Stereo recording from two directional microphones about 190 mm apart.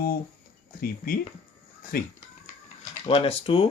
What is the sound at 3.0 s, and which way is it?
Speech, 30° left (ahead or behind).